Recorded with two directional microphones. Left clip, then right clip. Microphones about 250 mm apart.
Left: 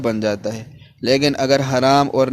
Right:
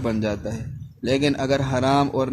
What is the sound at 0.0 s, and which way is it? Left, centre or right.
A man's voice, left.